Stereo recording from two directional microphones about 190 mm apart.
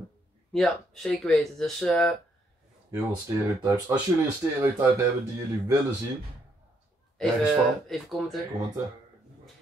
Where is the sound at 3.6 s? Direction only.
20° right (ahead or behind).